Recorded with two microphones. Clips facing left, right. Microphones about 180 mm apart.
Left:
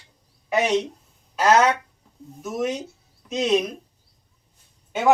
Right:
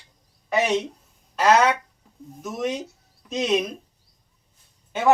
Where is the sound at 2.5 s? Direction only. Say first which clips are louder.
Left 1 dB; 5° left (ahead or behind).